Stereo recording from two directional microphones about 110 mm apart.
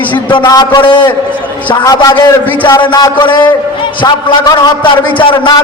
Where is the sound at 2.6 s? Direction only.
45° left (ahead or behind).